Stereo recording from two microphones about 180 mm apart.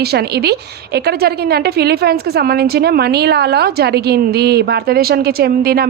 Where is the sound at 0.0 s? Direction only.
60° right (ahead or behind).